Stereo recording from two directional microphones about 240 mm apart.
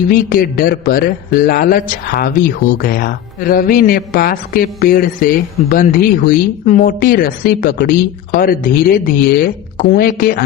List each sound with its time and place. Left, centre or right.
0.1 s a man's voice: left